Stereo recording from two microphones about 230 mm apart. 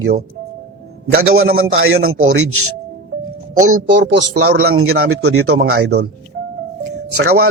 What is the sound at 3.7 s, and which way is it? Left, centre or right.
Speech, right.